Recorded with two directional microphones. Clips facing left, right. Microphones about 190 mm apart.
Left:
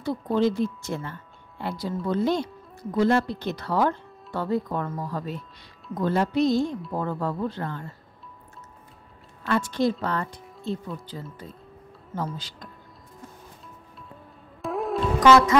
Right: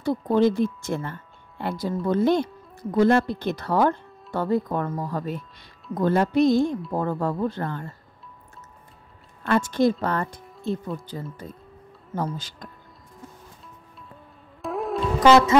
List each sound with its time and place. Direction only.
0.0 s speech: 50° right (ahead or behind)
9.5 s speech: 50° right (ahead or behind)
14.6 s music: centre (ahead or behind)
15.1 s music: 25° right (ahead or behind)